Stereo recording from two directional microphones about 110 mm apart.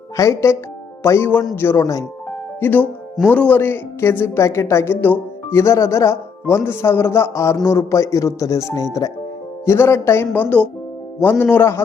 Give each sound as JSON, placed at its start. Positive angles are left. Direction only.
{"t": 0.2, "sound": "speech", "side_deg": 25}
{"t": 2.6, "sound": "speech", "side_deg": 15}